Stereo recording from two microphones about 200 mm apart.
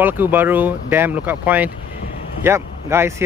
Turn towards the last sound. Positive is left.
turn(degrees=-10)  # may be behind; listen again after turning